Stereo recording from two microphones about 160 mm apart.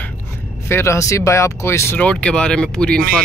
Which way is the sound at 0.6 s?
15° left (ahead or behind).